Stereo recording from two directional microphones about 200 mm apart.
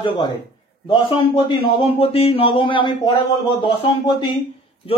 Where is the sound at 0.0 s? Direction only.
25° left (ahead or behind).